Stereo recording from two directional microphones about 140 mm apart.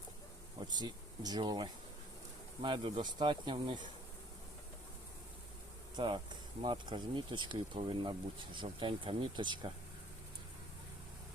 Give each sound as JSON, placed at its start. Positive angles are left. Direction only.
{"t": 0.7, "sound": "speech", "side_deg": -30}
{"t": 6.0, "sound": "speech", "side_deg": -40}